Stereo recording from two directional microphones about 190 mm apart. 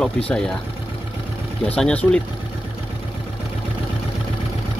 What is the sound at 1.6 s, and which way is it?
Speech, 5° left (ahead or behind).